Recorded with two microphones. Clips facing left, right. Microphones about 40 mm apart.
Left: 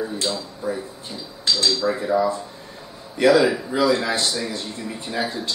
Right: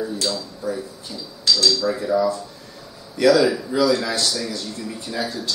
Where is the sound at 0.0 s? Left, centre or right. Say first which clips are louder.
Right 1 dB; left.